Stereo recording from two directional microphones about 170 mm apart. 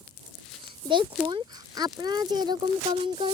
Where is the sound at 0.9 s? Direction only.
30° right (ahead or behind).